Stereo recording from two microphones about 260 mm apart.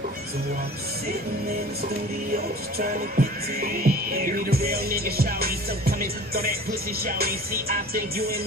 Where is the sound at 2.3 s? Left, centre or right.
Right.